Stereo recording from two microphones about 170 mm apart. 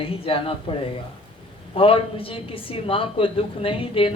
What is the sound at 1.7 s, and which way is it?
Speech, 30° left (ahead or behind).